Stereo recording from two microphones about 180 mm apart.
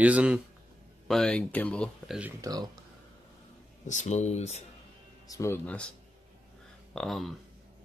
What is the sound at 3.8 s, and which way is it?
Speech, 40° left (ahead or behind).